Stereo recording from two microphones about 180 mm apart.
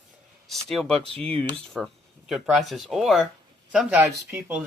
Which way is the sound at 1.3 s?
30° right (ahead or behind).